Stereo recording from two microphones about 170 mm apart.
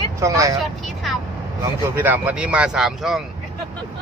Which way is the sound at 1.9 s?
10° right (ahead or behind).